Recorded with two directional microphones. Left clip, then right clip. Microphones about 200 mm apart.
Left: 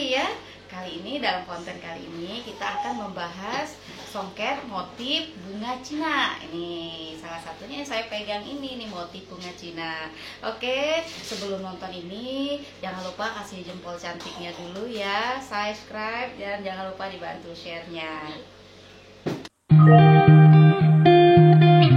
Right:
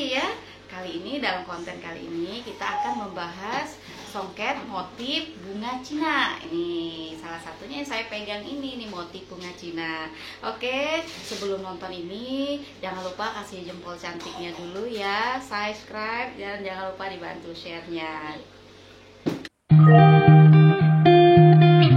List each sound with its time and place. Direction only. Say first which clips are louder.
0.0 s a sound: left 1 dB; 10° right (ahead or behind)
2.6 s speech: right 2 dB; 15° right (ahead or behind)
9.8 s speech: right 1 dB; 15° right (ahead or behind)
13.2 s speech: even; 15° right (ahead or behind)
19.2 s music: right 1 dB; centre (ahead or behind)